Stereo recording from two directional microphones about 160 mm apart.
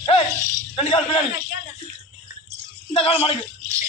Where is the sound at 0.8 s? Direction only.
35° left (ahead or behind).